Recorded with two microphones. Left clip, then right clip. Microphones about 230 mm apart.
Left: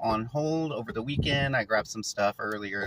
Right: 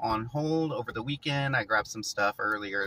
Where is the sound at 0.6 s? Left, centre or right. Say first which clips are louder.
Even; centre.